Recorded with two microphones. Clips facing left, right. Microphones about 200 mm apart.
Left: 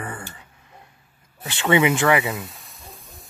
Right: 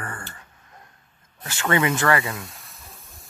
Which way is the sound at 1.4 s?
15° left (ahead or behind).